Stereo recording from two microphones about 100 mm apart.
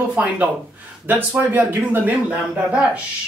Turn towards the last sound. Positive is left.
turn(degrees=-10)  # may be behind; listen again after turning